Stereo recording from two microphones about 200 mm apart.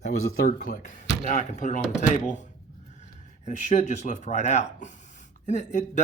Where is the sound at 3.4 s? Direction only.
35° left (ahead or behind).